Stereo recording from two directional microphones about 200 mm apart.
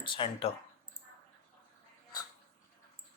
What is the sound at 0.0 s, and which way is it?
Speech, 25° left (ahead or behind).